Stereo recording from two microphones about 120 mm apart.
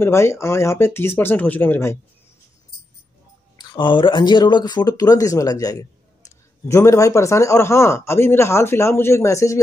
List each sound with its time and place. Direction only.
0.0 s speech: 20° left (ahead or behind)
3.5 s speech: 40° left (ahead or behind)